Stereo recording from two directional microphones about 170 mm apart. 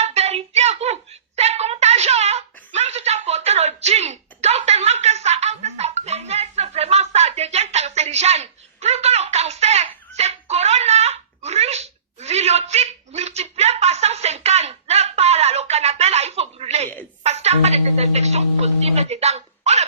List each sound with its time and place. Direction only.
0.0 s hands: 40° right (ahead or behind)
1.4 s a sound: 40° right (ahead or behind)
17.2 s music: 40° right (ahead or behind)